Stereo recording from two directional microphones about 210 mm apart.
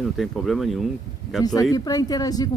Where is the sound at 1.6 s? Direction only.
15° left (ahead or behind).